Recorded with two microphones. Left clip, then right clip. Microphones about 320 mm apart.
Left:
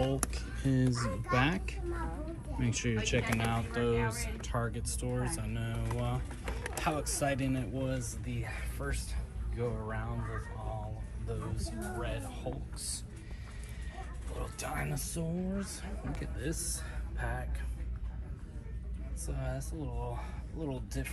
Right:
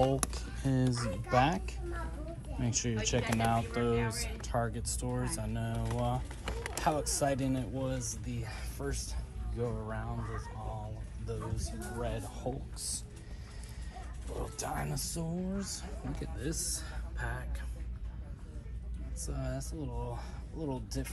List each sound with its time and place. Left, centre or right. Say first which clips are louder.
0.0 s music: right 3 dB; centre
1.3 s speech: right 3 dB; centre
7.4 s speech: even; right
7.8 s speech: even; centre
14.4 s speech: even; centre
19.2 s speech: even; centre